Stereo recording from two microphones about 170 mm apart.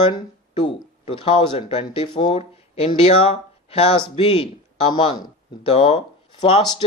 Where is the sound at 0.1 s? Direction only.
25° left (ahead or behind).